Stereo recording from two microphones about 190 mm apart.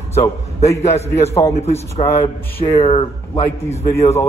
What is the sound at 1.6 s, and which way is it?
A man's voice, 35° left (ahead or behind).